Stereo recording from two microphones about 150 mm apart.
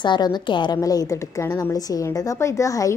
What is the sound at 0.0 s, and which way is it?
A woman's voice, 30° left (ahead or behind).